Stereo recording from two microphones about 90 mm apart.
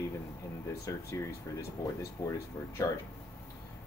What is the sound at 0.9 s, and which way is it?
Speech, 35° left (ahead or behind).